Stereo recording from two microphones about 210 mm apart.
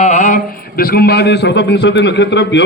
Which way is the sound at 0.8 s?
50° left (ahead or behind).